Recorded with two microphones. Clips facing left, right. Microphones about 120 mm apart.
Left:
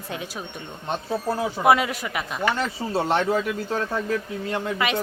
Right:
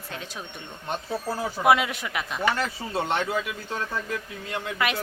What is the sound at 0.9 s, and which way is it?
Speech, 25° left (ahead or behind).